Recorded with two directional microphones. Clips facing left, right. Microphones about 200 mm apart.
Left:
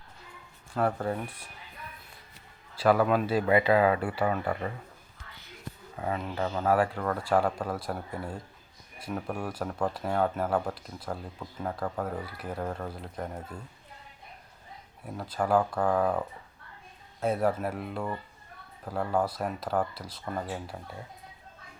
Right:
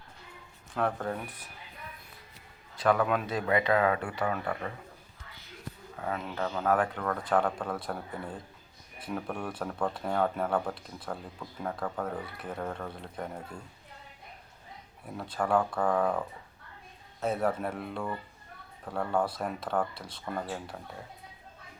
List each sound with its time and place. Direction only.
0.8 s speech: 10° left (ahead or behind)
2.8 s speech: 5° left (ahead or behind)
6.0 s speech: 10° left (ahead or behind)
15.0 s speech: centre (ahead or behind)